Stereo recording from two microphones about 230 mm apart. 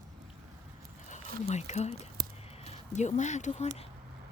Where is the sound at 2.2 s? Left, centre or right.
Right.